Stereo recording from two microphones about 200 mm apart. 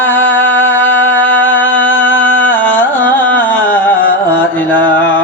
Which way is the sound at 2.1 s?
70° left (ahead or behind).